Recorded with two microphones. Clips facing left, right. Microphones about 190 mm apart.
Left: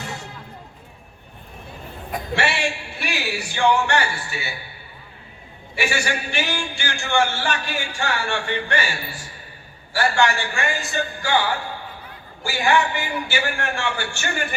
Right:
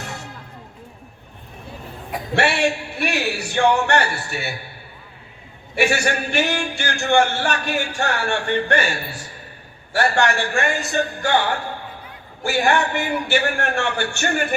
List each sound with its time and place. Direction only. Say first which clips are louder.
2.3 s speech: right 5 dB; 60° right (ahead or behind)
5.7 s speech: right 5 dB; 60° right (ahead or behind)
9.9 s speech: right 1 dB; 60° right (ahead or behind)
12.5 s speech: right 1 dB; 60° right (ahead or behind)